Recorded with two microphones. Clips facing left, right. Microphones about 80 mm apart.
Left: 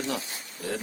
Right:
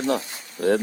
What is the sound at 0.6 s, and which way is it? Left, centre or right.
Speech, right.